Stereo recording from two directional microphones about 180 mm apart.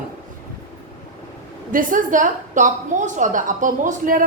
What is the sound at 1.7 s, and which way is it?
A woman's voice, 50° right (ahead or behind).